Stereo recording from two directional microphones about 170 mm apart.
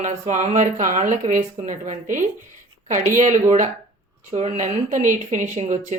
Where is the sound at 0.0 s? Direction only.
45° right (ahead or behind).